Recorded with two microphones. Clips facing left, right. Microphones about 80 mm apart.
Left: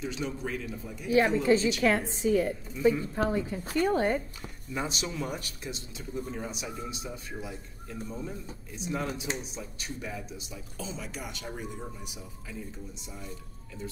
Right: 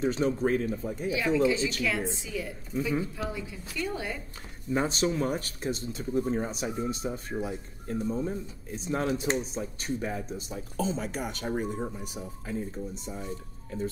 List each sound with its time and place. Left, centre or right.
0.0 s speech: right
1.1 s a woman's voice: left
4.7 s speech: right